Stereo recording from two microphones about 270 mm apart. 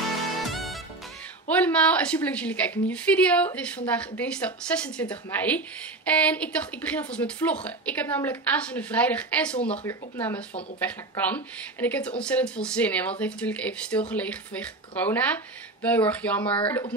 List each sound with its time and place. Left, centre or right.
0.4 s music: centre
1.5 s a woman's voice: centre